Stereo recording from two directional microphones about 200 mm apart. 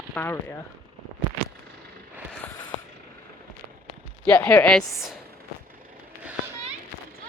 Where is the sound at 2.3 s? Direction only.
5° left (ahead or behind).